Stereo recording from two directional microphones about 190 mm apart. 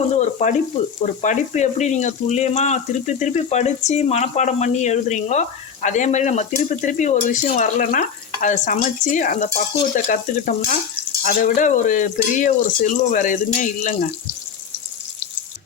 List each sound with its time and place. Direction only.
0.2 s sizzle: 40° left (ahead or behind)
1.0 s speech: 40° left (ahead or behind)